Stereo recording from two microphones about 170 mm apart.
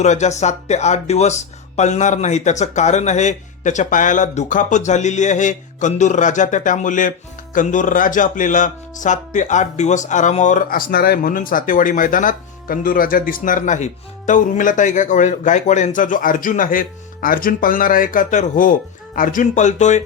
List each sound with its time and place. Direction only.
0.0 s speech: 40° left (ahead or behind)